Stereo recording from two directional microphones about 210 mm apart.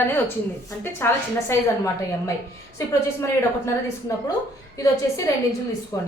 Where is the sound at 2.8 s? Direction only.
15° left (ahead or behind).